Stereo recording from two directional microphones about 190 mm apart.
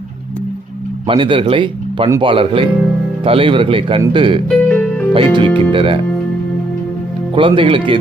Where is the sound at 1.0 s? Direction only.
25° right (ahead or behind).